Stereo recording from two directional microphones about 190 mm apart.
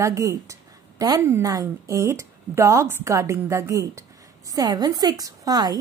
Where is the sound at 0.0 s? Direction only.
15° right (ahead or behind).